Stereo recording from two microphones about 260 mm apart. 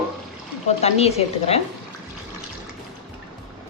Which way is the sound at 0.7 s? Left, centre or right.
Left.